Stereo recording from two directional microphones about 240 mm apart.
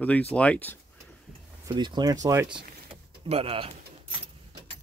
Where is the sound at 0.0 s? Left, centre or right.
Centre.